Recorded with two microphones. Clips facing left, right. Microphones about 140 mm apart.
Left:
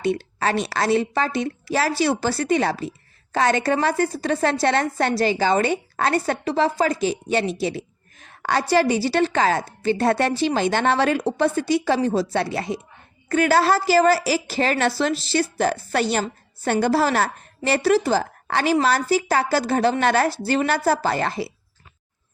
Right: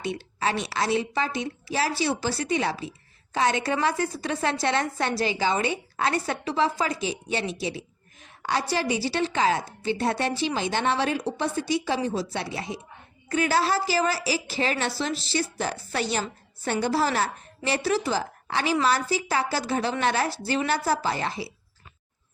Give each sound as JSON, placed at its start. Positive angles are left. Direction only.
{"t": 0.0, "sound": "a woman's voice", "side_deg": 55}
{"t": 4.9, "sound": "a woman's voice", "side_deg": 60}
{"t": 10.3, "sound": "a woman's voice", "side_deg": 50}
{"t": 11.3, "sound": "a woman's voice", "side_deg": 65}
{"t": 11.9, "sound": "a woman's voice", "side_deg": 50}
{"t": 12.3, "sound": "a woman's voice", "side_deg": 65}
{"t": 13.7, "sound": "a woman's voice", "side_deg": 55}
{"t": 14.7, "sound": "speech", "side_deg": 90}
{"t": 15.4, "sound": "a woman's voice", "side_deg": 60}